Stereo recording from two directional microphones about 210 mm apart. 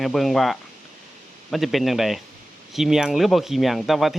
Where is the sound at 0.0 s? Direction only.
Centre (ahead or behind).